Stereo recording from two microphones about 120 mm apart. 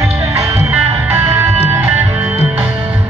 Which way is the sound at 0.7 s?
20° right (ahead or behind).